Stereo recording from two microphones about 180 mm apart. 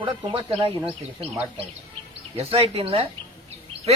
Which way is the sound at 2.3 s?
30° right (ahead or behind).